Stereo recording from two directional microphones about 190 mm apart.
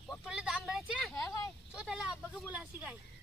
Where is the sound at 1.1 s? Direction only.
15° left (ahead or behind).